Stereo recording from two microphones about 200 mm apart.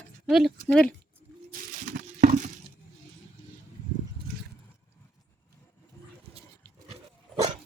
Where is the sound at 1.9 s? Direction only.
40° right (ahead or behind).